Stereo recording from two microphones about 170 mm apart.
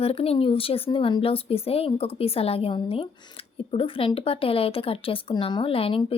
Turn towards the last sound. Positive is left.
turn(degrees=30)  # may be behind; listen again after turning